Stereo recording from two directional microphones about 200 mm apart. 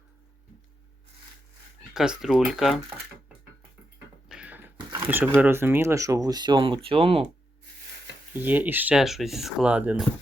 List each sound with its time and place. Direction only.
1.9 s speech: 5° right (ahead or behind)
4.3 s beatboxing: 5° right (ahead or behind)
4.9 s a sound: 10° right (ahead or behind)
5.4 s speech: 10° right (ahead or behind); by 7.3 s 30° right (ahead or behind)
8.3 s speech: 10° right (ahead or behind)